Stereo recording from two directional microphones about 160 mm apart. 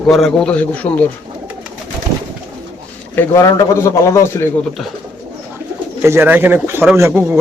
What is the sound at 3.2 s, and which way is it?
A man's voice, 20° left (ahead or behind).